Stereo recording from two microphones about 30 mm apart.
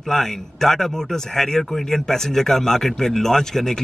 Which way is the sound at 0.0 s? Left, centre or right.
Centre.